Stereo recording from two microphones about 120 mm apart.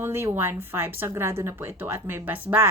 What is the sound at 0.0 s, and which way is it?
A woman's voice, 20° right (ahead or behind).